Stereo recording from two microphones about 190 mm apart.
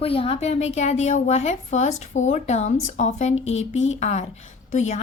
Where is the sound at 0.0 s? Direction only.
30° left (ahead or behind).